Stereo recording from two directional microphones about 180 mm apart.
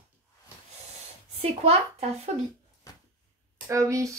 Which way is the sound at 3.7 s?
15° right (ahead or behind).